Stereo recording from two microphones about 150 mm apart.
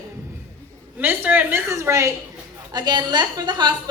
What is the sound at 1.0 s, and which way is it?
A woman's voice, 10° right (ahead or behind).